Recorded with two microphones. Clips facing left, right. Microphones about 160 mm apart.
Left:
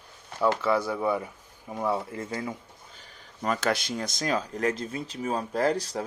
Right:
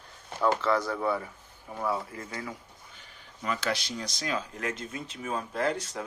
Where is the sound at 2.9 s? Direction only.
40° left (ahead or behind).